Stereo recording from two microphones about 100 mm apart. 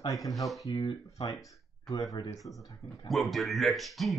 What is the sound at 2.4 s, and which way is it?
Speech, centre (ahead or behind).